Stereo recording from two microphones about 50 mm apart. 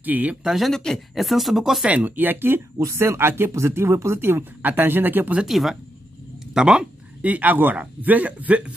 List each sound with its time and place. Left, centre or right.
0.0 s a man's voice: right
0.4 s speech: centre
0.7 s speech: centre
0.9 s speech: centre
1.9 s a man's voice: right
2.8 s speech: right
4.2 s speech: right
5.5 s speech: centre
6.5 s speech: centre
7.2 s a man's voice: right